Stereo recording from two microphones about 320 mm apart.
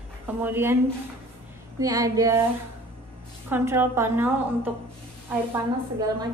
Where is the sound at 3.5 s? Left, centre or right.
Centre.